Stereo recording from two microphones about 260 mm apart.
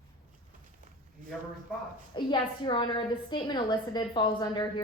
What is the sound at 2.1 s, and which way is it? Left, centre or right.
A woman's voice, centre.